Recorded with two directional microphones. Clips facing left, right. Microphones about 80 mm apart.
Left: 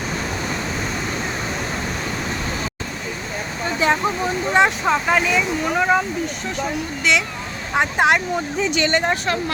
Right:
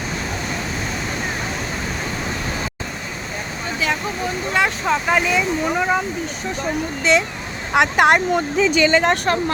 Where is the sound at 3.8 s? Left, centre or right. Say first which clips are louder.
Left 4 dB; left.